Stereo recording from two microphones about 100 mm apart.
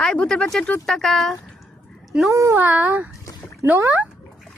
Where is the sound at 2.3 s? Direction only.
30° right (ahead or behind).